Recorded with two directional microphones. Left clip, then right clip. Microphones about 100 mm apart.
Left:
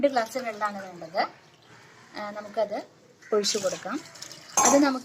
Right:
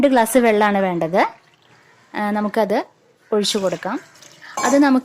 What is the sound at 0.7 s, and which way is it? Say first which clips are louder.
Speech: right 18 dB; 60° right (ahead or behind).